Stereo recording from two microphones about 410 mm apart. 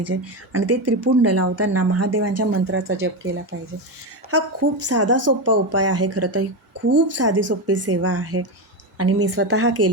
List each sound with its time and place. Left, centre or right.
0.0 s speech: right